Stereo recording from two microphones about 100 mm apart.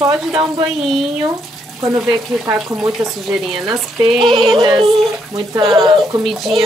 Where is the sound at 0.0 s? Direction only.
40° right (ahead or behind).